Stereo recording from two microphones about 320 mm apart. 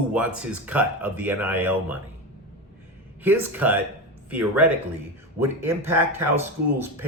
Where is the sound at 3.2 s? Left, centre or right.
Centre.